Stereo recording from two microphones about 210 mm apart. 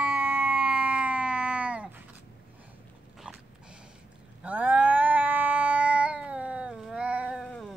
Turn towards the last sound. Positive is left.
turn(degrees=0)  # may be behind; listen again after turning